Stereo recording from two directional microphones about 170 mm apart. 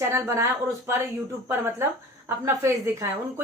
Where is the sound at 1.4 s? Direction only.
15° right (ahead or behind).